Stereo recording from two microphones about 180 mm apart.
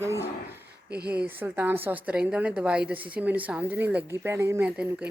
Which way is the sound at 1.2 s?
10° right (ahead or behind).